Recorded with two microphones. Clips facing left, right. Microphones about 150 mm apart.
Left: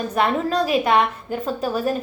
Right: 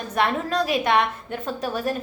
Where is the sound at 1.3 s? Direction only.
Centre (ahead or behind).